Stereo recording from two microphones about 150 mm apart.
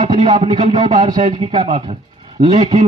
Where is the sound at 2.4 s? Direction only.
30° right (ahead or behind).